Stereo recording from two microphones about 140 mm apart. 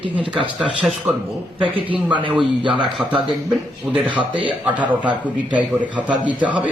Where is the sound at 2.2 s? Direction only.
35° right (ahead or behind).